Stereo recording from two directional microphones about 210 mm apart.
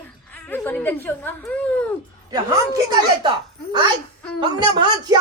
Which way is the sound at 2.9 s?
20° right (ahead or behind).